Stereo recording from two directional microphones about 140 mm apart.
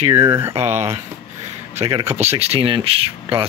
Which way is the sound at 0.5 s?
50° right (ahead or behind).